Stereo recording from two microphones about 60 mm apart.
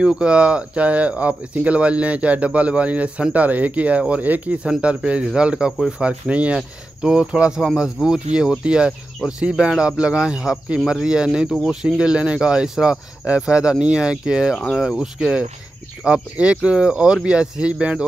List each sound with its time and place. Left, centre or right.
0.0 s speech: centre
16.0 s speech: centre